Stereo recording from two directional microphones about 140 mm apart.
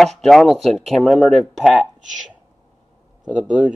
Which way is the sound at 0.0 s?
Centre (ahead or behind).